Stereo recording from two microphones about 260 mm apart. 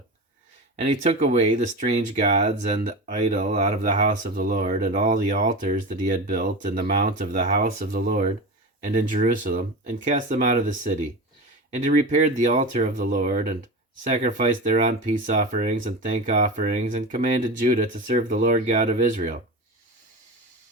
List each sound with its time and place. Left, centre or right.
0.8 s speech: right